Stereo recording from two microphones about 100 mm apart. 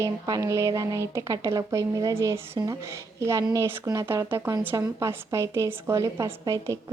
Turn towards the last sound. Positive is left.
turn(degrees=-30)  # may be behind; listen again after turning